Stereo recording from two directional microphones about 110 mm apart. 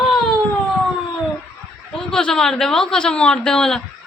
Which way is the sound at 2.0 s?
5° left (ahead or behind).